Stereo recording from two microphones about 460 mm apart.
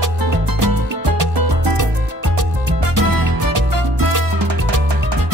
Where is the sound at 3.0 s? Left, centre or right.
Right.